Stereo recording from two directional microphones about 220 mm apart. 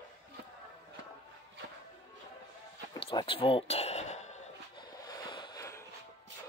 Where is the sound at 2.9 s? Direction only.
20° left (ahead or behind).